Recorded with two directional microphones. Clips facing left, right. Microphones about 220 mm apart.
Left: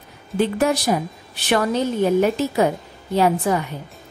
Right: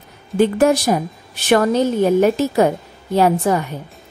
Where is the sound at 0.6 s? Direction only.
45° right (ahead or behind).